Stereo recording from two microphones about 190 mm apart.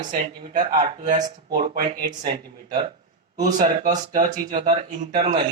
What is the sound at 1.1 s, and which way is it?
Speech, 40° right (ahead or behind).